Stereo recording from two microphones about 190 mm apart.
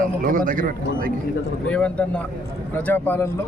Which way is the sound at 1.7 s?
5° left (ahead or behind).